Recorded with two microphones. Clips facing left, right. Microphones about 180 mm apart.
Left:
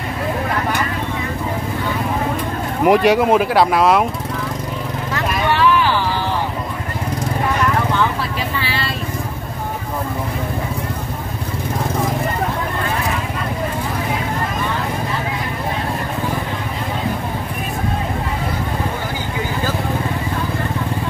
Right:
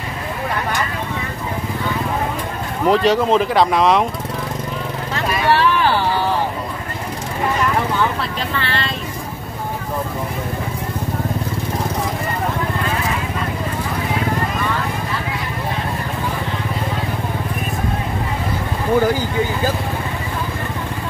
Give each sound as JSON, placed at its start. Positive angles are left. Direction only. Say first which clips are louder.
{"t": 2.8, "sound": "speech", "louder": "left 2 dB", "side_deg": 15}
{"t": 5.1, "sound": "vehicle", "louder": "right 2 dB", "side_deg": -35}
{"t": 8.5, "sound": "speech", "louder": "right 1 dB", "side_deg": 10}